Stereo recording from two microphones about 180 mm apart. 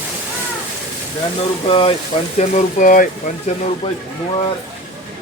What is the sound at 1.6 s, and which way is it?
Speech, 30° left (ahead or behind).